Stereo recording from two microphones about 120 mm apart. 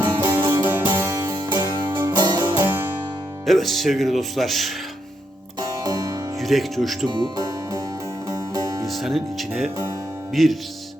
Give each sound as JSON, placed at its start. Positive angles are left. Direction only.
{"t": 0.0, "sound": "music", "side_deg": -35}
{"t": 0.3, "sound": "music", "side_deg": -20}
{"t": 1.2, "sound": "music", "side_deg": -35}
{"t": 3.4, "sound": "speech", "side_deg": 0}
{"t": 5.5, "sound": "music", "side_deg": -30}
{"t": 6.4, "sound": "speech", "side_deg": 0}
{"t": 7.1, "sound": "music", "side_deg": -35}
{"t": 8.9, "sound": "speech", "side_deg": 0}